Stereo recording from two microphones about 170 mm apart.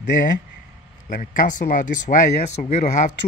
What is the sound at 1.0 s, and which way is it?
Speech, 50° left (ahead or behind).